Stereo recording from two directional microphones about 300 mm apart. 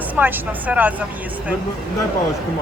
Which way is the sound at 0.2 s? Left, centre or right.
Centre.